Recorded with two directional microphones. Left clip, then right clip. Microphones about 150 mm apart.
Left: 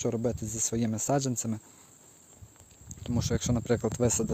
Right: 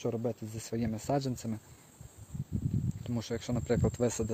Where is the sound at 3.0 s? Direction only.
45° left (ahead or behind).